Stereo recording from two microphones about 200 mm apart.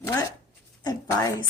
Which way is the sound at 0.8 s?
20° left (ahead or behind).